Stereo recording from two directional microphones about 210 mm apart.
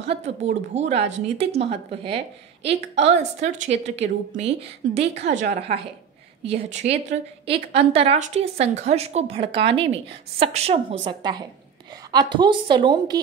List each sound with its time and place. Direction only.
0.4 s speech: 35° right (ahead or behind)